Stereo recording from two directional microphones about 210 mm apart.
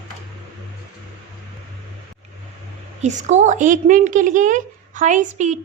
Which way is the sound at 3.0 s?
35° right (ahead or behind).